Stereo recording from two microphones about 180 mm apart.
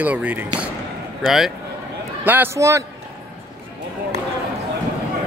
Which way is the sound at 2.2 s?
10° right (ahead or behind).